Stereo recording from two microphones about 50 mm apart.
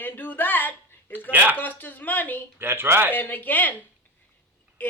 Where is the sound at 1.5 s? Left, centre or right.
Left.